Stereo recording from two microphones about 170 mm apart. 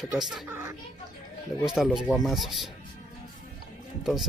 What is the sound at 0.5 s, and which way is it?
Children playing, 15° right (ahead or behind).